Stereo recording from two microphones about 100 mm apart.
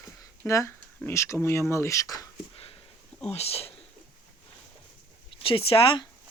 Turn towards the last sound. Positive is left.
turn(degrees=55)  # may be behind; listen again after turning